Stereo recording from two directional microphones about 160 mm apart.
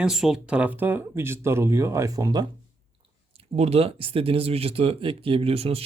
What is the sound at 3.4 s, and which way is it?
Speech, 40° right (ahead or behind).